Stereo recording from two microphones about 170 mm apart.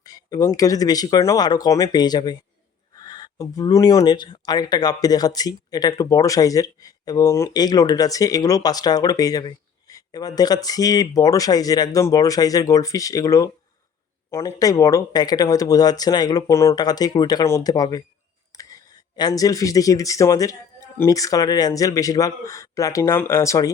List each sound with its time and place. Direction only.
0.0 s speech: 20° left (ahead or behind)